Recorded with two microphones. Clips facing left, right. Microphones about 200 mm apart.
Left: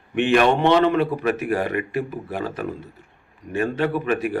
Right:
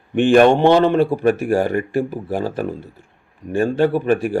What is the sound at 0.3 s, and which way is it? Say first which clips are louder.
A man's voice: right 6 dB; 40° right (ahead or behind).